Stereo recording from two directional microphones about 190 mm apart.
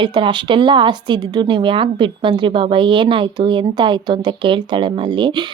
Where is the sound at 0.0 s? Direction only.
25° right (ahead or behind).